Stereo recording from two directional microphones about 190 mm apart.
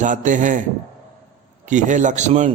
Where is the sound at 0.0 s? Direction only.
40° right (ahead or behind).